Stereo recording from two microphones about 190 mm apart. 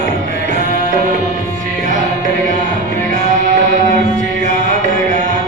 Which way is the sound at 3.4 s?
40° right (ahead or behind).